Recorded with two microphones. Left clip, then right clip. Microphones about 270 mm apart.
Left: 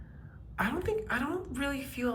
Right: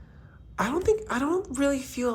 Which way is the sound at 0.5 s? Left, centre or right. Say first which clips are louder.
Right 7 dB; centre.